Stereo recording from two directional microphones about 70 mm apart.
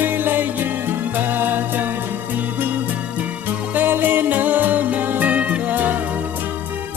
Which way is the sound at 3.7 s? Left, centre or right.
Right.